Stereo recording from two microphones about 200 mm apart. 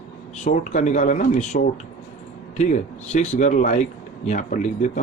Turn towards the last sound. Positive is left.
turn(degrees=40)  # may be behind; listen again after turning